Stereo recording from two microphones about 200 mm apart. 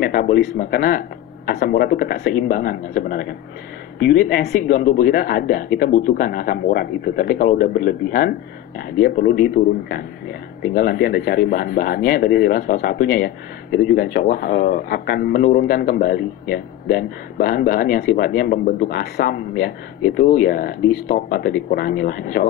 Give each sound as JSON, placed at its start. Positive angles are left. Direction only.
{"t": 0.0, "sound": "speech", "side_deg": 50}